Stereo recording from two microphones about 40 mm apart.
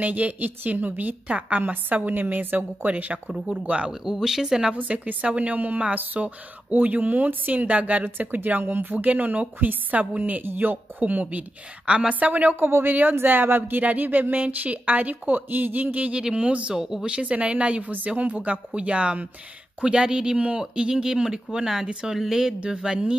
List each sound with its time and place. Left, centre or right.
0.0 s speech: right
1.2 s a woman's voice: right
1.6 s a woman's voice: right
3.9 s speech: centre
4.7 s a woman's voice: right
8.0 s speech: right
8.9 s speech: right
10.4 s a woman's voice: right
12.5 s speech: right
13.7 s speech: right
14.3 s speech: right
16.1 s speech: right
16.7 s speech: centre
17.0 s a woman's voice: right